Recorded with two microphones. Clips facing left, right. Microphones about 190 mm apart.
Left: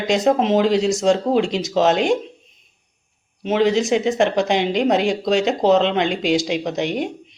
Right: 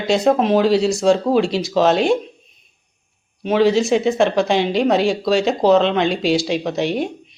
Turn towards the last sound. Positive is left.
turn(degrees=15)  # may be behind; listen again after turning